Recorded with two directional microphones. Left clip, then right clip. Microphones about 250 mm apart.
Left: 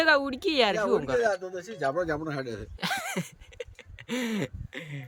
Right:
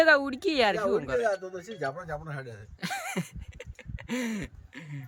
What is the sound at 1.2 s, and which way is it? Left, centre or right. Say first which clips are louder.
Speech: left 2 dB; left.